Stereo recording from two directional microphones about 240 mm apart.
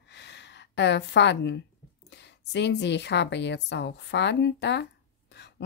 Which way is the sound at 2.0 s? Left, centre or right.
Left.